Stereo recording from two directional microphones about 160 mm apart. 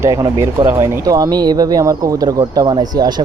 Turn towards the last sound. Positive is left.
turn(degrees=-25)  # may be behind; listen again after turning